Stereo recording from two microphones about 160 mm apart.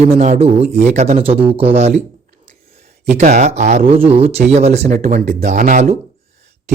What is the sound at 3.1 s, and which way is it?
Speech, 50° right (ahead or behind).